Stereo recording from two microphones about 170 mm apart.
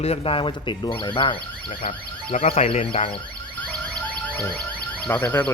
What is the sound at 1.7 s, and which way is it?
Car alarm, 55° left (ahead or behind).